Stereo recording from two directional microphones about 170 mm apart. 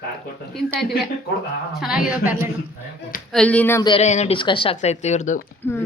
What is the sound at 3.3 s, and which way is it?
Speech, 5° left (ahead or behind).